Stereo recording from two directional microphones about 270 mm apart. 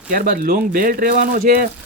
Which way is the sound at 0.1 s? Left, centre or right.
Right.